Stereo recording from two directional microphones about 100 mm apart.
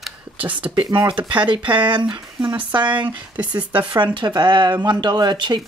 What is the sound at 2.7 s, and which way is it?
Speech, 50° right (ahead or behind).